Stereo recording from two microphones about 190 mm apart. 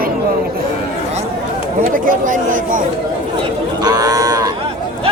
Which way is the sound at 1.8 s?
45° right (ahead or behind).